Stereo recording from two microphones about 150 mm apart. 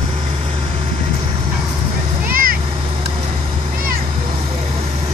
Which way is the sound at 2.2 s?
70° right (ahead or behind).